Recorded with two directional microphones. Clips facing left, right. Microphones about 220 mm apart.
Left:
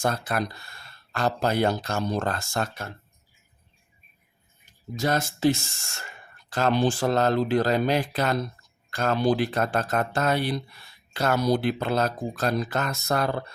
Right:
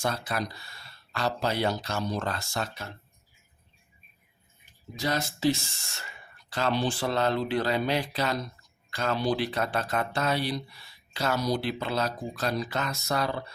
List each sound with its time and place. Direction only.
0.0 s speech: 50° left (ahead or behind)
4.9 s speech: 50° left (ahead or behind)